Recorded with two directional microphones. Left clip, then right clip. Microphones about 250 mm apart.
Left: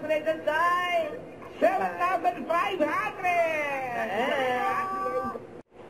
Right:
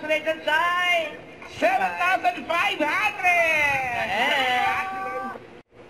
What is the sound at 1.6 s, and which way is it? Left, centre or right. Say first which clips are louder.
Speech: right 3 dB; centre.